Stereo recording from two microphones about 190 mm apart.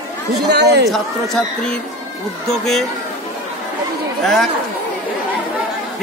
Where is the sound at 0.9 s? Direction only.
Centre (ahead or behind).